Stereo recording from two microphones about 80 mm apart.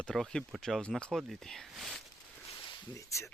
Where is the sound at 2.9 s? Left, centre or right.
Left.